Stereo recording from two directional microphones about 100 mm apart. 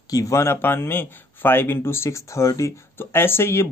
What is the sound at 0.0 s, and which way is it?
Speech, 35° left (ahead or behind).